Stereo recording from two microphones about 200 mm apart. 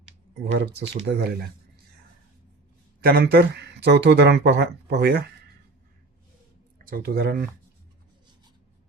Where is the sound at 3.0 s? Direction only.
50° right (ahead or behind).